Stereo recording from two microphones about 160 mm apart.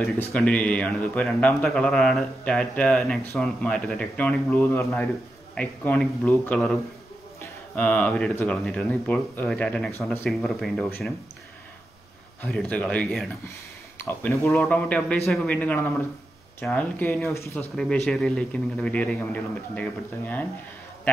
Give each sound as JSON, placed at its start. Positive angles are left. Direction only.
{"t": 0.2, "sound": "a man's voice", "side_deg": 5}
{"t": 12.4, "sound": "speech", "side_deg": 5}
{"t": 13.9, "sound": "speech", "side_deg": 15}
{"t": 14.5, "sound": "a man's voice", "side_deg": 5}
{"t": 17.7, "sound": "a man's voice", "side_deg": 5}